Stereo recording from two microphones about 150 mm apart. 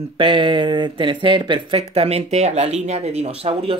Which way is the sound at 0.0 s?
35° right (ahead or behind).